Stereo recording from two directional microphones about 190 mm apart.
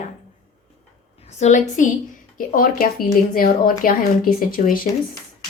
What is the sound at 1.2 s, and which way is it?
A woman's voice, 40° left (ahead or behind).